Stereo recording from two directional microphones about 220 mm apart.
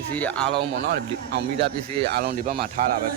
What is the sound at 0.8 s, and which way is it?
Speech, 50° right (ahead or behind).